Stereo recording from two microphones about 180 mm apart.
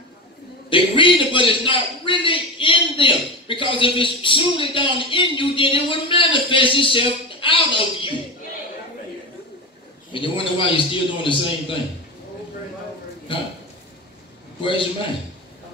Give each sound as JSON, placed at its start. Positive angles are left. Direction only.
{"t": 0.7, "sound": "a man's voice", "side_deg": 30}
{"t": 10.1, "sound": "a man's voice", "side_deg": 30}
{"t": 14.6, "sound": "a man's voice", "side_deg": 30}